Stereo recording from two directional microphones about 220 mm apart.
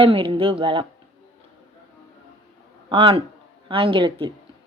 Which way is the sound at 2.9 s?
25° right (ahead or behind).